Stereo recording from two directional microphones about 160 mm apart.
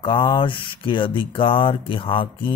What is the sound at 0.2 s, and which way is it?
Speech, 30° left (ahead or behind).